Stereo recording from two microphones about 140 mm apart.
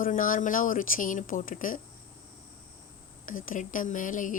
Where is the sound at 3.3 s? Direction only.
75° left (ahead or behind).